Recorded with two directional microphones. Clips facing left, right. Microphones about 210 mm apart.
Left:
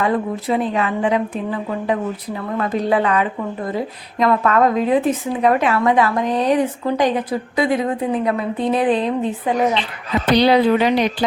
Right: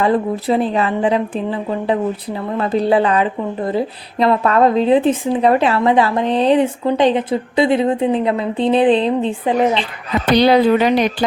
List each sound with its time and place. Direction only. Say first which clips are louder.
0.0 s a woman's voice: right 3 dB; 30° right (ahead or behind)
10.3 s speech: right 2 dB; 45° right (ahead or behind)